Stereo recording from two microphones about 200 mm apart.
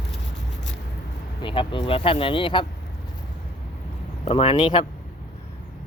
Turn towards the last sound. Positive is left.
turn(degrees=25)  # may be behind; listen again after turning